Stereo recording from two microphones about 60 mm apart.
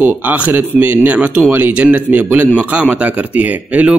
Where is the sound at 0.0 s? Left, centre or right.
Right.